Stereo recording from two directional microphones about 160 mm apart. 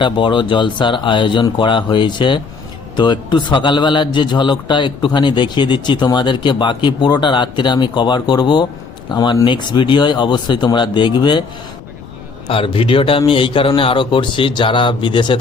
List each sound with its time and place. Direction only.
0.0 s a man's voice: 30° left (ahead or behind)
12.5 s a man's voice: 35° left (ahead or behind)